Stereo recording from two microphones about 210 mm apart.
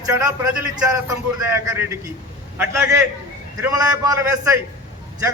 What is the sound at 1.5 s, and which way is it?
A man's voice, 15° right (ahead or behind).